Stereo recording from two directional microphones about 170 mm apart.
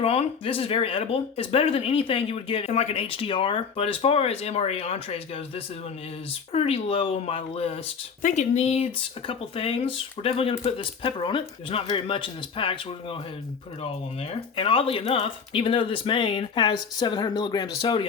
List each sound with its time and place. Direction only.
0.0 s speech: 35° left (ahead or behind)
8.2 s speech: 45° left (ahead or behind)
14.2 s speech: 30° left (ahead or behind)